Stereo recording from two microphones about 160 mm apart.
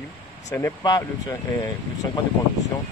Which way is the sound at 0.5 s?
20° left (ahead or behind).